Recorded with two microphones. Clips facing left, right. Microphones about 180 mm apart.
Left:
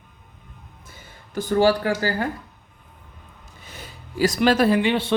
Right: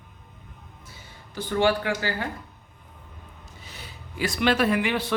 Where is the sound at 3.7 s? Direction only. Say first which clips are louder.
Left 6 dB; 45° left (ahead or behind); by 5.1 s 25° left (ahead or behind).